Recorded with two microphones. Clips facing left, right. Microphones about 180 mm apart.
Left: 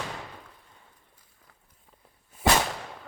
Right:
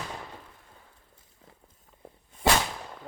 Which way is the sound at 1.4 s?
25° right (ahead or behind).